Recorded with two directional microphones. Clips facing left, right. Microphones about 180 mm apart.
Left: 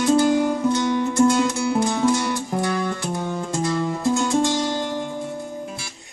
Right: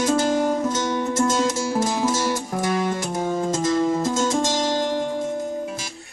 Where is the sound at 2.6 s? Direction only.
20° right (ahead or behind).